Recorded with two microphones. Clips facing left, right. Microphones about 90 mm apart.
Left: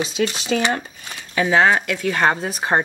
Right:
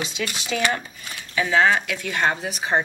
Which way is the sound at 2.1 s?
45° left (ahead or behind).